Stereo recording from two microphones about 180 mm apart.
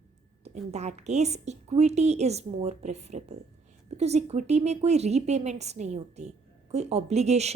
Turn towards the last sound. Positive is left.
turn(degrees=-35)  # may be behind; listen again after turning